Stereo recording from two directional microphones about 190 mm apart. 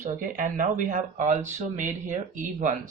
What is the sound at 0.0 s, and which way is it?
Speech, 45° right (ahead or behind).